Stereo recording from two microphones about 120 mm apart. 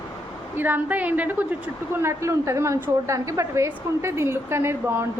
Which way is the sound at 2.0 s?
25° right (ahead or behind).